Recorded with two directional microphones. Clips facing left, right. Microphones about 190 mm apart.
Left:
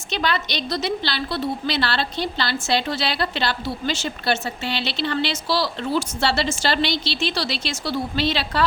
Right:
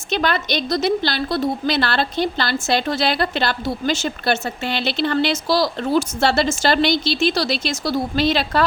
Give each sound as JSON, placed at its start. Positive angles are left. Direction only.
{"t": 0.1, "sound": "a woman's voice", "side_deg": -50}